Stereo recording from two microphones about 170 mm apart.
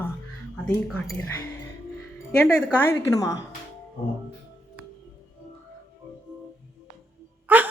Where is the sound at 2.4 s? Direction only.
10° left (ahead or behind).